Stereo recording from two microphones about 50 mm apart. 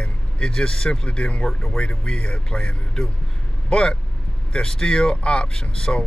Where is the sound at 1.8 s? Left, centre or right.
Centre.